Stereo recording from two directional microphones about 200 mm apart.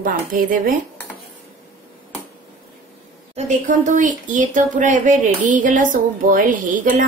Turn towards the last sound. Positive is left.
turn(degrees=-40)  # may be behind; listen again after turning